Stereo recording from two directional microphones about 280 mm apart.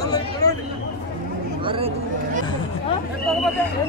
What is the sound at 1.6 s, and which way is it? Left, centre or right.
Speech, right.